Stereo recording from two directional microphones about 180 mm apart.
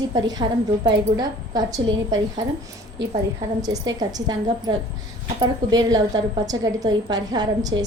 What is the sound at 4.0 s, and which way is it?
A woman's voice, 20° right (ahead or behind).